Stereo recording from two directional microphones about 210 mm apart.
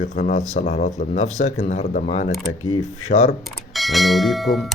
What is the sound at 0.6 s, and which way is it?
Speech, 45° left (ahead or behind).